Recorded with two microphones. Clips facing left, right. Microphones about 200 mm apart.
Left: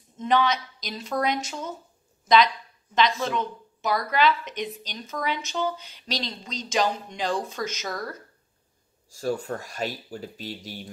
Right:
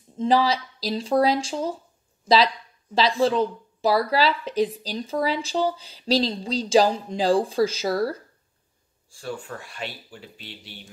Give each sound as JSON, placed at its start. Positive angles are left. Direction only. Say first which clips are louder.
{"t": 0.2, "sound": "speech", "louder": "right 3 dB", "side_deg": -30}
{"t": 9.1, "sound": "speech", "louder": "left 5 dB", "side_deg": 40}